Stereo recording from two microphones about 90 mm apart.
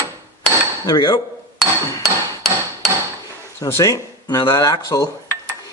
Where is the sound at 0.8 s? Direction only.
55° left (ahead or behind).